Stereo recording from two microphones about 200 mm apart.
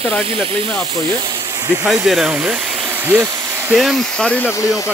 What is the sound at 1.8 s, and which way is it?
Speech, centre (ahead or behind).